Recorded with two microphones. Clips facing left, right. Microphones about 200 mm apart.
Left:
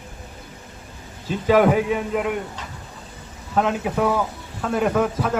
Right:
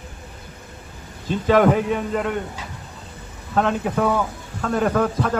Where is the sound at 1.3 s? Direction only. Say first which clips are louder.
Even; 10° left (ahead or behind).